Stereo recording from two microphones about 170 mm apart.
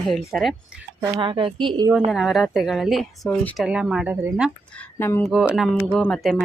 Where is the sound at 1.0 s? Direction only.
25° right (ahead or behind).